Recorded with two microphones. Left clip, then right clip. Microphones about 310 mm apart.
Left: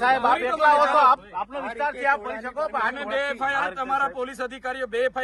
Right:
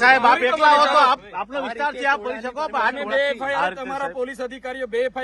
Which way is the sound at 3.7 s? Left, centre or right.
Centre.